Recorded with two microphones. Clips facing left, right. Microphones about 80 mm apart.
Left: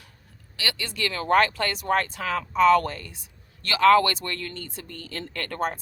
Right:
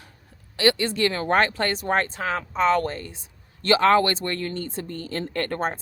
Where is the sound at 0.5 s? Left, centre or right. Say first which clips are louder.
Right 11 dB; right.